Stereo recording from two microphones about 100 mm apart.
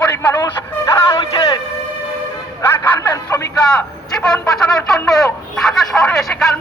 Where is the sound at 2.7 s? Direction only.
15° left (ahead or behind).